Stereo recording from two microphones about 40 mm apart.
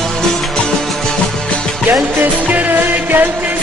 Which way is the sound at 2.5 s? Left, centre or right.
Right.